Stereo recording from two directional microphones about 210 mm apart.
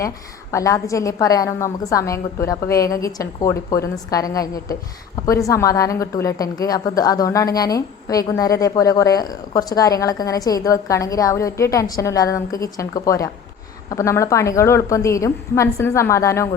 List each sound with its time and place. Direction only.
0.5 s a woman's voice: 15° left (ahead or behind)